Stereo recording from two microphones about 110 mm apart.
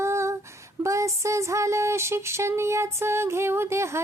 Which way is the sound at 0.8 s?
30° right (ahead or behind).